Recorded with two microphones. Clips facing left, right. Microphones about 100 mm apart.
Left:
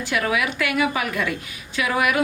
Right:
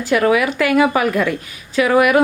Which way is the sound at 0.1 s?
45° right (ahead or behind).